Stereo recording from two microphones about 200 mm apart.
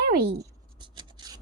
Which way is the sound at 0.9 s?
20° right (ahead or behind).